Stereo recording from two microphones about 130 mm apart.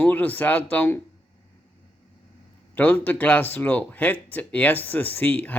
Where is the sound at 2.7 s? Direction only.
15° left (ahead or behind).